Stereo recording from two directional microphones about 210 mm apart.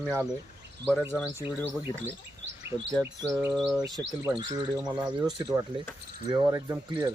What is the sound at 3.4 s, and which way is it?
Bird, centre (ahead or behind).